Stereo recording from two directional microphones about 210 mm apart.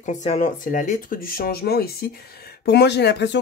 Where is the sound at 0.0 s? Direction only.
35° left (ahead or behind).